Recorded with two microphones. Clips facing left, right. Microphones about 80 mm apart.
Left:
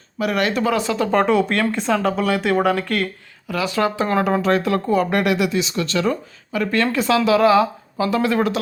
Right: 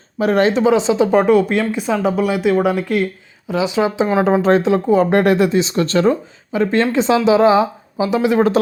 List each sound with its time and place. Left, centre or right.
0.2 s speech: right
1.2 s speech: centre
3.5 s speech: centre
4.4 s speech: right
5.2 s speech: right; by 8.4 s centre